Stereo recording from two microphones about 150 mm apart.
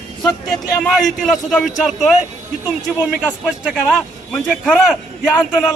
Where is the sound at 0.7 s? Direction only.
Centre (ahead or behind).